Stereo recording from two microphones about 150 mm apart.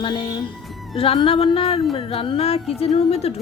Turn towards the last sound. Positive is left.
turn(degrees=40)  # may be behind; listen again after turning